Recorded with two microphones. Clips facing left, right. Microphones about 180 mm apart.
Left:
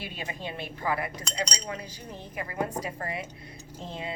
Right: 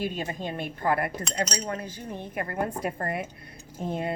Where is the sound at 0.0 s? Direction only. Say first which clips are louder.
Right 6 dB; 45° right (ahead or behind).